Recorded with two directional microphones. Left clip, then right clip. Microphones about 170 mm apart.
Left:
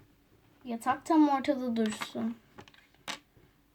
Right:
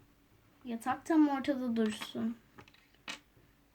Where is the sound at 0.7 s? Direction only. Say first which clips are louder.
Left 5 dB; 5° right (ahead or behind).